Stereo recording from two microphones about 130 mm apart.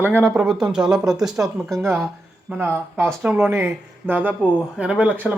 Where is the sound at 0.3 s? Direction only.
5° right (ahead or behind).